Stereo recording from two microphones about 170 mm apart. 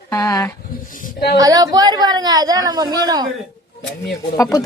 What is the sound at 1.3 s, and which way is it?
Speech, 20° right (ahead or behind).